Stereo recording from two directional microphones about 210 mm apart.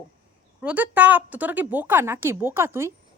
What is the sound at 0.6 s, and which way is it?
A woman's voice, 5° right (ahead or behind).